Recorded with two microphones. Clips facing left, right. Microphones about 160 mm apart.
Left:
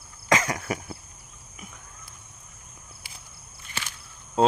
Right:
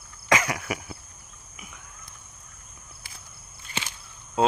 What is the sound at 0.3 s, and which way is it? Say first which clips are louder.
Cough: even; 25° left (ahead or behind).